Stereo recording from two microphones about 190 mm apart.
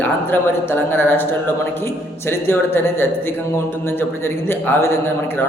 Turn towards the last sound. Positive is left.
turn(degrees=10)  # may be behind; listen again after turning